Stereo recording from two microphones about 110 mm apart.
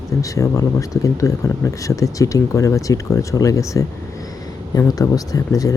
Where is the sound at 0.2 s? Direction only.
30° left (ahead or behind).